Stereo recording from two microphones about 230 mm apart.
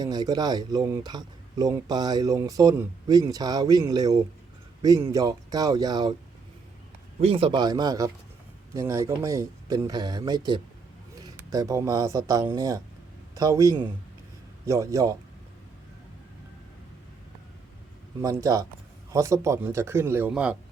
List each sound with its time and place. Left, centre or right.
0.0 s speech: centre
7.2 s a man's voice: right
18.2 s speech: centre